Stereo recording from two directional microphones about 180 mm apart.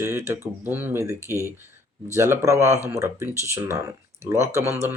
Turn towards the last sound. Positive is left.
turn(degrees=-15)  # may be behind; listen again after turning